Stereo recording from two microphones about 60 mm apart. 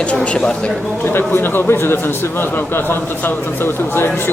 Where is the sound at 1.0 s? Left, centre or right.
Left.